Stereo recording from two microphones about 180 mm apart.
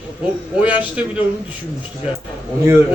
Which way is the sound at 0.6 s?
10° right (ahead or behind).